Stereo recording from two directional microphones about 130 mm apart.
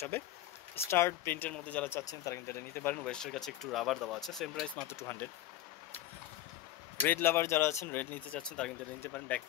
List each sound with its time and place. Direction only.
0.8 s speech: 20° left (ahead or behind)
2.0 s speech: 25° left (ahead or behind); by 4.8 s 5° left (ahead or behind)
4.8 s speech: 20° left (ahead or behind)
7.0 s speech: 15° left (ahead or behind)